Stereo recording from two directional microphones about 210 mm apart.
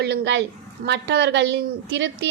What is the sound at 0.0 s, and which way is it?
A woman's voice, 55° right (ahead or behind).